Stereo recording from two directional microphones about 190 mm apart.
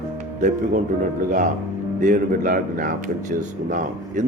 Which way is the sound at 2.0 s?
45° right (ahead or behind).